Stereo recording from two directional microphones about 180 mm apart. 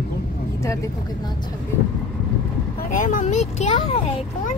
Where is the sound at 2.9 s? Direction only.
45° left (ahead or behind).